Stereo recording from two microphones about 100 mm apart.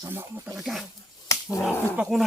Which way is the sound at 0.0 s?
25° right (ahead or behind).